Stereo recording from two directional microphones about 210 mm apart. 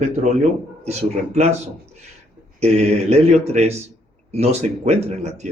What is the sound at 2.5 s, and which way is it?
Speech, 30° right (ahead or behind).